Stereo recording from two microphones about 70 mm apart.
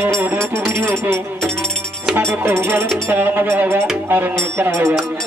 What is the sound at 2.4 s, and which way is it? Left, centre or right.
Speech, right.